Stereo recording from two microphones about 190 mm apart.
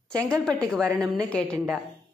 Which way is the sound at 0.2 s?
5° left (ahead or behind).